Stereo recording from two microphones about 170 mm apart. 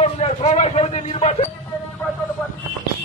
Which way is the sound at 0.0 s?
35° left (ahead or behind).